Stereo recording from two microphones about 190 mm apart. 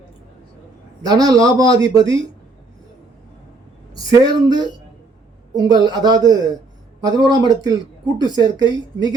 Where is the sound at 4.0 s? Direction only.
20° right (ahead or behind).